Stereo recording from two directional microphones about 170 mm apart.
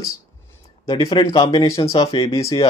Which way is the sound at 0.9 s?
25° left (ahead or behind).